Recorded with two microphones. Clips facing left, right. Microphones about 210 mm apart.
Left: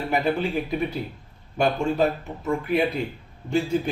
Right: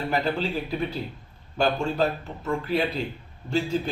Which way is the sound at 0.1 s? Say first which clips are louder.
Left 4 dB; 15° left (ahead or behind).